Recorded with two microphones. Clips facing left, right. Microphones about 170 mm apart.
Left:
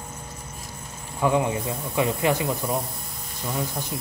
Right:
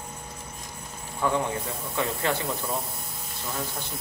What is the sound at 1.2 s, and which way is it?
Speech, 15° left (ahead or behind).